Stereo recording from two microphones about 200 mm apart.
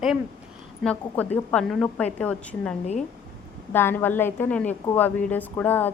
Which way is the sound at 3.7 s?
10° left (ahead or behind).